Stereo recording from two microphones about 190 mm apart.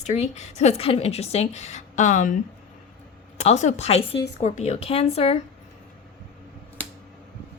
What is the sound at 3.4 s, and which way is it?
A woman's voice, 35° left (ahead or behind).